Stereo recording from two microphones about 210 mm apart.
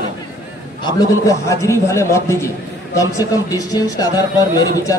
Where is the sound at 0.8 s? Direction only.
15° left (ahead or behind).